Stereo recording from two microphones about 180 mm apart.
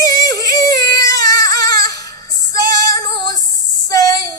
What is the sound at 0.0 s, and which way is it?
Yodeling, 20° left (ahead or behind).